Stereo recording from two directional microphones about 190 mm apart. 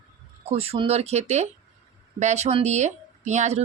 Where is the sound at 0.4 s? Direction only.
30° right (ahead or behind).